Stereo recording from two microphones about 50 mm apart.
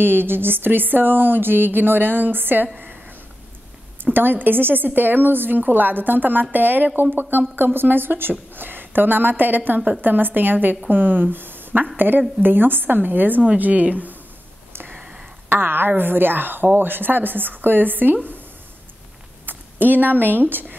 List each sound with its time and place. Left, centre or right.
0.0 s speech: right
4.0 s a woman's voice: right
14.7 s a sound: right
15.5 s a woman's voice: right
19.4 s speech: right